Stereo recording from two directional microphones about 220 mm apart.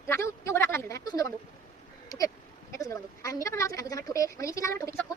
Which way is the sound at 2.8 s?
15° left (ahead or behind).